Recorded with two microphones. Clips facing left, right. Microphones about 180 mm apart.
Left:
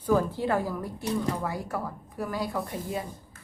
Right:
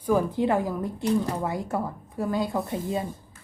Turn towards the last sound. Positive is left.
turn(degrees=-25)  # may be behind; listen again after turning